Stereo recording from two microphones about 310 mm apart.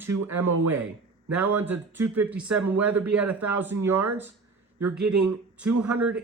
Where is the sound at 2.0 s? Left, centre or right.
Centre.